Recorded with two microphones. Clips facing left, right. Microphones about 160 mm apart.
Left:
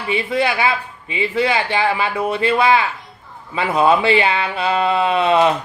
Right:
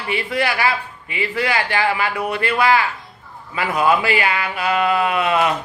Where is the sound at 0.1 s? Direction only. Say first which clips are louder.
Left 3 dB; 20° left (ahead or behind).